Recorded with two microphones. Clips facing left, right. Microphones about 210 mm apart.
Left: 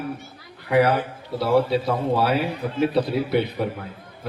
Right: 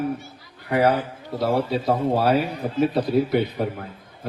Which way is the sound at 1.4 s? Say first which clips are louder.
Left 2 dB; 45° right (ahead or behind).